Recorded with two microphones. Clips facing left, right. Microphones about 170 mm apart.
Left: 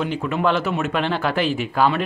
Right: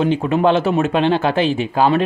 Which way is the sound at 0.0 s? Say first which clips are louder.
Right 6 dB; 25° right (ahead or behind).